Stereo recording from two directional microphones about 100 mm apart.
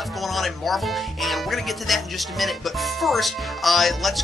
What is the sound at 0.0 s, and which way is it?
Speech, centre (ahead or behind).